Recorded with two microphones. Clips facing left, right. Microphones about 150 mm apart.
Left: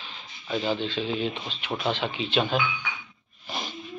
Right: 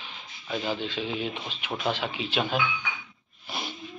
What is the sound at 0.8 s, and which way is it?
A man's voice, 10° right (ahead or behind).